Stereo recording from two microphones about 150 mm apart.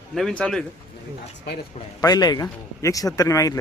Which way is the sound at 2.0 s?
25° left (ahead or behind).